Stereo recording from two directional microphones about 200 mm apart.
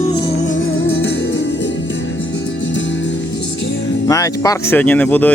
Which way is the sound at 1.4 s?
65° left (ahead or behind).